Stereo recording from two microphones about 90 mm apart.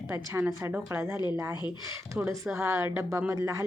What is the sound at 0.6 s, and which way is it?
Speech, 20° right (ahead or behind).